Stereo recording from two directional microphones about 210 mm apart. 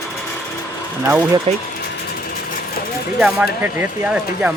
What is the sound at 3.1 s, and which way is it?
Speech, 5° right (ahead or behind).